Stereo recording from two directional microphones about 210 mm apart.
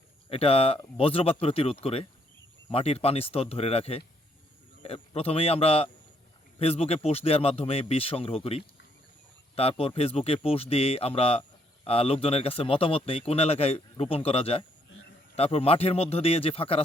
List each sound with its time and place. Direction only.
0.3 s speech: 25° left (ahead or behind)